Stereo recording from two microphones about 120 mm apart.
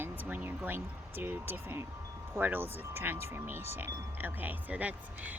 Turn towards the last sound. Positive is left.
turn(degrees=-10)  # may be behind; listen again after turning